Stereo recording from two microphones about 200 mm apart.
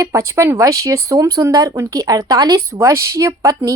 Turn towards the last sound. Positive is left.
turn(degrees=-15)  # may be behind; listen again after turning